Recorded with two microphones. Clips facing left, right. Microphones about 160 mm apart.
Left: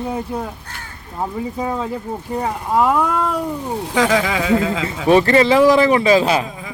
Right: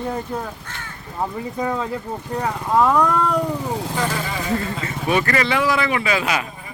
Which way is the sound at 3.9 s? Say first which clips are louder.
Left 7 dB; 90° left.